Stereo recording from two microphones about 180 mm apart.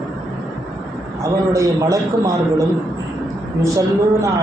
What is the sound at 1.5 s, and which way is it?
A man's voice, 15° right (ahead or behind).